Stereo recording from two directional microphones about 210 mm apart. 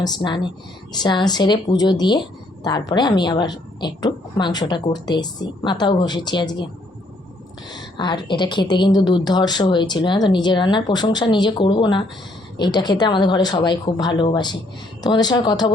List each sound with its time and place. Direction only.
0.0 s a woman's voice: 20° left (ahead or behind)
7.7 s a woman's voice: 20° left (ahead or behind)